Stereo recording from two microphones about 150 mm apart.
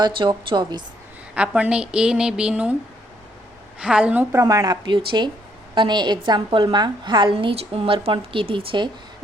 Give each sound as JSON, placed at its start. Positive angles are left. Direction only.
{"t": 0.0, "sound": "a woman's voice", "side_deg": -35}
{"t": 1.4, "sound": "a woman's voice", "side_deg": -10}
{"t": 3.8, "sound": "a woman's voice", "side_deg": -5}